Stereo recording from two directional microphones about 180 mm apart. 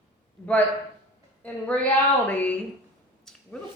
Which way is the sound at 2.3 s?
10° left (ahead or behind).